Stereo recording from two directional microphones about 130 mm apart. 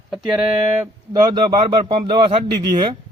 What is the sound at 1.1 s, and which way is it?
A man's voice, 35° right (ahead or behind).